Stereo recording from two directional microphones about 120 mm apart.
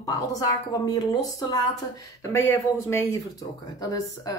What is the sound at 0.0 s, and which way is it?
Speech, 30° left (ahead or behind).